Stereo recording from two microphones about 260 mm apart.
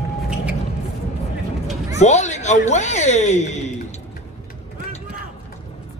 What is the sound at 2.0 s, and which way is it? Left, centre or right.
A man's voice, left.